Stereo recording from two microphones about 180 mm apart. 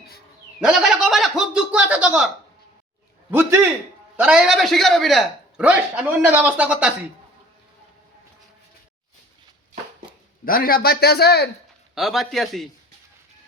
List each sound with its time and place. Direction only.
0.6 s a sound: 5° right (ahead or behind)
3.2 s a man's voice: 15° right (ahead or behind)
10.4 s a man's voice: 50° left (ahead or behind)
11.9 s a man's voice: centre (ahead or behind)